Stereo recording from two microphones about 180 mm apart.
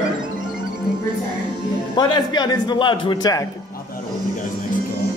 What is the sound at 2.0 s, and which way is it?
A man's voice, 25° left (ahead or behind).